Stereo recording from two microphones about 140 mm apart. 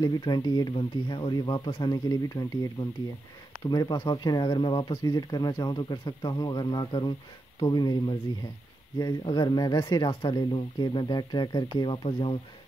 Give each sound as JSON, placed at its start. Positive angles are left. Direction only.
{"t": 0.0, "sound": "speech", "side_deg": 30}